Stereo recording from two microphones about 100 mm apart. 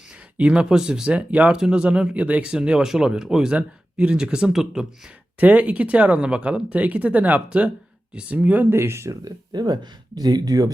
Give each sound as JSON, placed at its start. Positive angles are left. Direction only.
{"t": 0.3, "sound": "speech", "side_deg": -10}
{"t": 5.4, "sound": "speech", "side_deg": -15}